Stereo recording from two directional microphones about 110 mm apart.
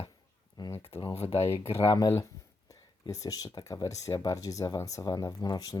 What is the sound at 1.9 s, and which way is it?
Speech, 30° left (ahead or behind).